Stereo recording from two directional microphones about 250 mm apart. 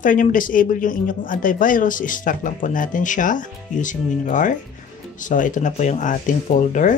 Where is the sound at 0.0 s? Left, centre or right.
Left.